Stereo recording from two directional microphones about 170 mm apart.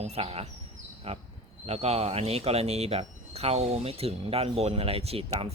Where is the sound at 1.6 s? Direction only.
40° right (ahead or behind).